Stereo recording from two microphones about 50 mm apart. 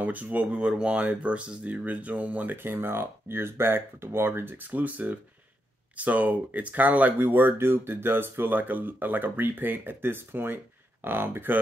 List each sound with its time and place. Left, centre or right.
0.0 s speech: right